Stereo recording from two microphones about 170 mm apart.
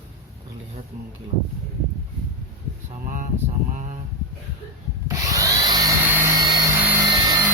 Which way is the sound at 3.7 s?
45° right (ahead or behind).